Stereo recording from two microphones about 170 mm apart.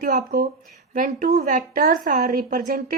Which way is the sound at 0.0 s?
60° right (ahead or behind).